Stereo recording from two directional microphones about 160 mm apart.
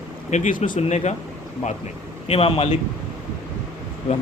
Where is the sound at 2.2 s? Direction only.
40° left (ahead or behind).